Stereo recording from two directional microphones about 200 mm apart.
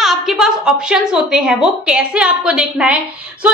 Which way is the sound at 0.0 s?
Centre (ahead or behind).